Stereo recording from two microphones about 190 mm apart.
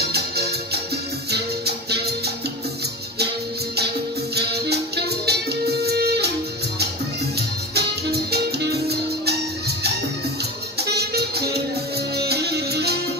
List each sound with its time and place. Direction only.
0.0 s music: 60° right (ahead or behind)
4.4 s music: 60° right (ahead or behind)
7.3 s music: 55° right (ahead or behind)